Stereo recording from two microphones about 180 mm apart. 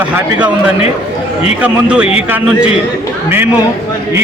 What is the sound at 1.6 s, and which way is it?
A man's voice, 5° right (ahead or behind).